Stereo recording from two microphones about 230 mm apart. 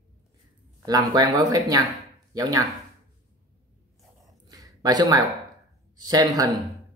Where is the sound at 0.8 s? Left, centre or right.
Centre.